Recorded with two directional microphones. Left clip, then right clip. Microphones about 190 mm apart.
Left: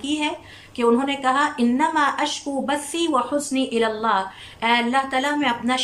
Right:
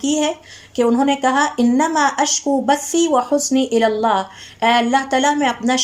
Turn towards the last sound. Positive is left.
turn(degrees=-35)  # may be behind; listen again after turning